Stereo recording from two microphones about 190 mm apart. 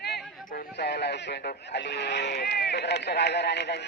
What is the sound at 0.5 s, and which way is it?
Speech, 60° left (ahead or behind).